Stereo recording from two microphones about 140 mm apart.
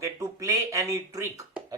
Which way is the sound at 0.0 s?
20° right (ahead or behind).